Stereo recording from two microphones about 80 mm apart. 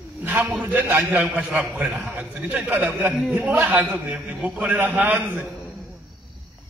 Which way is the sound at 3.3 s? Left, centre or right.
Centre.